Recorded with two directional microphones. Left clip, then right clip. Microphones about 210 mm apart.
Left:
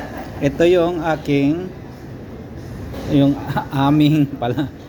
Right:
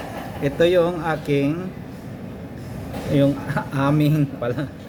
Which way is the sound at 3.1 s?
5° left (ahead or behind).